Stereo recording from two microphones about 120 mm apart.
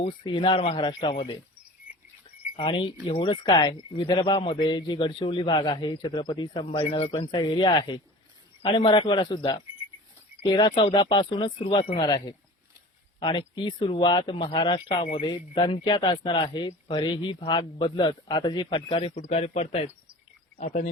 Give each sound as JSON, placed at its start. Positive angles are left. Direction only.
{"t": 0.3, "sound": "speech", "side_deg": 45}
{"t": 2.6, "sound": "speech", "side_deg": 45}
{"t": 19.1, "sound": "a man's voice", "side_deg": 65}